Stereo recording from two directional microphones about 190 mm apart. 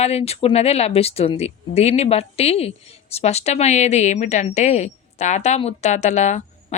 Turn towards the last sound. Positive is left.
turn(degrees=40)  # may be behind; listen again after turning